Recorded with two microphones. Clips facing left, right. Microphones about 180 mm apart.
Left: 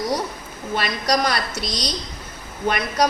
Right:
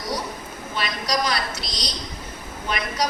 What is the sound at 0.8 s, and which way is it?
A woman's voice, 50° left (ahead or behind).